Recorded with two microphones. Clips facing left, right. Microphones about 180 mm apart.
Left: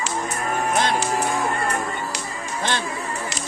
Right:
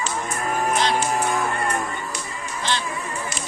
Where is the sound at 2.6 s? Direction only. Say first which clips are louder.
Left 1 dB; 55° left (ahead or behind).